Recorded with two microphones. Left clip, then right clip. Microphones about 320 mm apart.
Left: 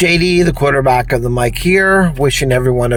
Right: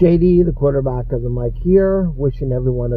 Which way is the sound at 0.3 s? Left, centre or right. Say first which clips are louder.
Left 3 dB; left.